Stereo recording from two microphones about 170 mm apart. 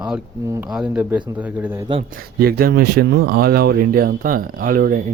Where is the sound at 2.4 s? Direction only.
65° right (ahead or behind).